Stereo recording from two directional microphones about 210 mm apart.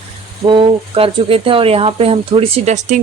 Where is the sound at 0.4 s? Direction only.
25° right (ahead or behind).